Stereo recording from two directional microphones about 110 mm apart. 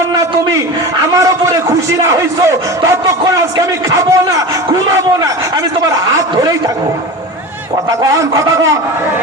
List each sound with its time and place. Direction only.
1.1 s a man's voice: 30° right (ahead or behind)
3.8 s a sound: 30° right (ahead or behind)
7.9 s a man's voice: 30° right (ahead or behind)